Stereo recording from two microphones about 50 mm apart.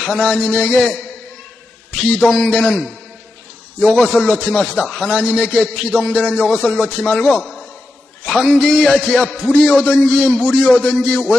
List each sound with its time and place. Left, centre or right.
0.0 s music: centre
0.7 s music: centre
2.0 s a man's voice: left
3.8 s music: centre
4.5 s a man's voice: left; by 5.5 s centre
5.5 s music: centre
6.6 s a man's voice: left
8.2 s music: centre
9.4 s a man's voice: left
11.0 s music: centre